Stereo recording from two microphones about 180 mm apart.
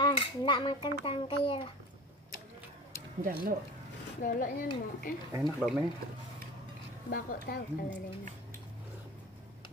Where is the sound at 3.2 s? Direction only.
50° right (ahead or behind).